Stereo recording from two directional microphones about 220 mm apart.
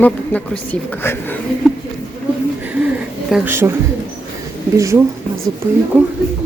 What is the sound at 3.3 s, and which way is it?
Speech, 5° right (ahead or behind).